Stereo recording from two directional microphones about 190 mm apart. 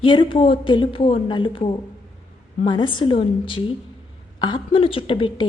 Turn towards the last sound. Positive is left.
turn(degrees=25)  # may be behind; listen again after turning